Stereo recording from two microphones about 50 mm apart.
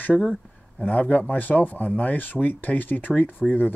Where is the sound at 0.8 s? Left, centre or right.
Left.